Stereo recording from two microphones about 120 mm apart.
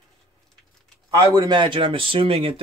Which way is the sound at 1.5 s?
45° right (ahead or behind).